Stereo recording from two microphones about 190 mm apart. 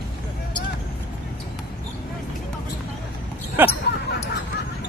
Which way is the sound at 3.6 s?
10° right (ahead or behind).